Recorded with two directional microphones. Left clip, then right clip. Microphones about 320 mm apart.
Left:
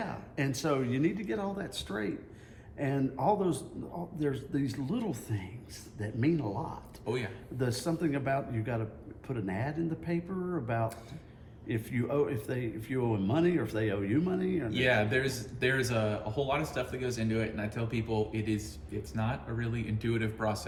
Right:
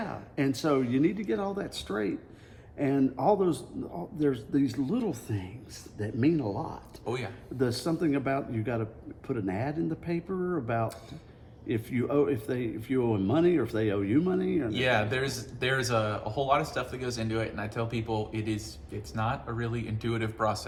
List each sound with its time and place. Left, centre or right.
0.0 s speech: centre